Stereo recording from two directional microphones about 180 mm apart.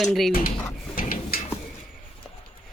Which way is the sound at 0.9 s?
50° left (ahead or behind).